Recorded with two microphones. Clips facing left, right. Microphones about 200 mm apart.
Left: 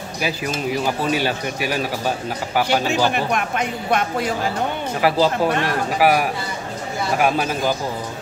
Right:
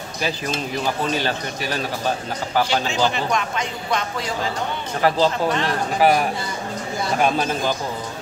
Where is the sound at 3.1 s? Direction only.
55° left (ahead or behind).